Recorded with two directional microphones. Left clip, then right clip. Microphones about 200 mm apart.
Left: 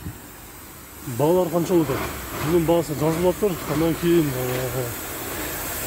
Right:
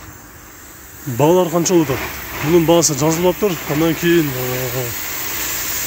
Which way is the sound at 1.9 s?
60° left (ahead or behind).